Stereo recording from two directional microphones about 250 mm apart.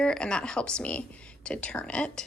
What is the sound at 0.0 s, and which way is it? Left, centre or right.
Speech, centre.